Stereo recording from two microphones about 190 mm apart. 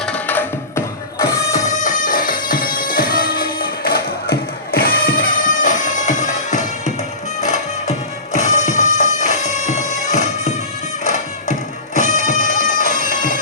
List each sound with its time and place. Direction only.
0.0 s music: 10° left (ahead or behind)
1.6 s music: 40° left (ahead or behind)
11.9 s bagpipes: 40° left (ahead or behind)